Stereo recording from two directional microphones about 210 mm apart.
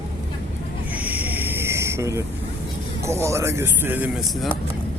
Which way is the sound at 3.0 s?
15° right (ahead or behind).